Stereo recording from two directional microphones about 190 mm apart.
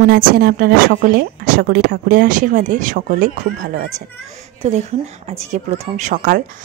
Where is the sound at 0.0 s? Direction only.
50° right (ahead or behind).